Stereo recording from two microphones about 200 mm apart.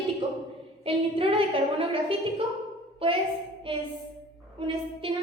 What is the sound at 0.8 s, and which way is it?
A woman's voice, 25° right (ahead or behind).